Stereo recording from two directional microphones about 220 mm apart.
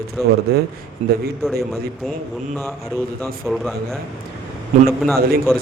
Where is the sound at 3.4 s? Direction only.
Centre (ahead or behind).